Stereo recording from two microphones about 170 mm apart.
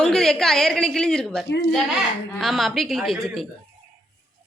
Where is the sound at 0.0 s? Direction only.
5° left (ahead or behind).